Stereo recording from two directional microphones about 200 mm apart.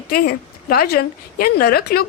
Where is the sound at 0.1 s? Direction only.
50° left (ahead or behind).